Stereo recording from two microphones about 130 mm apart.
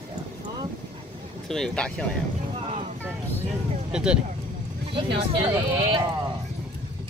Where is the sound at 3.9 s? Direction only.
5° right (ahead or behind).